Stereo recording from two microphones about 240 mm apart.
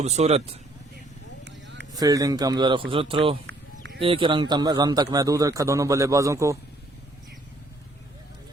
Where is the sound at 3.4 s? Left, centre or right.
Right.